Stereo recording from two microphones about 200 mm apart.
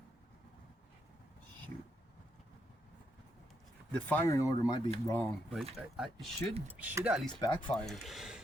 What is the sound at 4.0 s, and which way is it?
Speech, 10° left (ahead or behind).